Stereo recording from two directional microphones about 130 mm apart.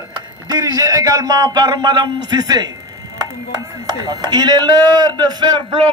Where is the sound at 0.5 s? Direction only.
30° right (ahead or behind).